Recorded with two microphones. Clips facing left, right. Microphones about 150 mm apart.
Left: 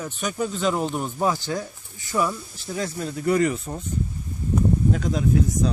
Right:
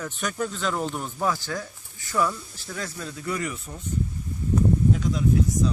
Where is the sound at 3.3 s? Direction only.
65° left (ahead or behind).